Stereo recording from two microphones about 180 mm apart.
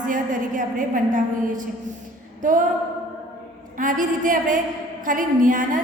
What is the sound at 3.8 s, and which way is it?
A woman's voice, 50° right (ahead or behind).